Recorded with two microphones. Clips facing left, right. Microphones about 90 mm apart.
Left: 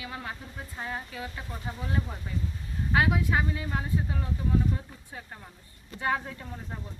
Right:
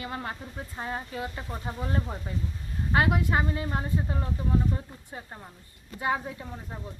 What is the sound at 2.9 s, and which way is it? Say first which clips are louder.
A woman's voice: right 1 dB; 40° right (ahead or behind).